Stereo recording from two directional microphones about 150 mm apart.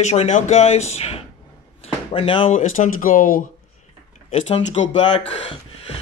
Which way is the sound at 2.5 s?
55° left (ahead or behind).